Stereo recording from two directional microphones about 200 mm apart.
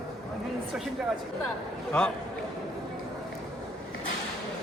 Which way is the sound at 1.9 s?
5° left (ahead or behind).